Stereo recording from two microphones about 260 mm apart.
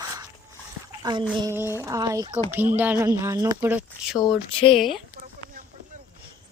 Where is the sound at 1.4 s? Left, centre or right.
Centre.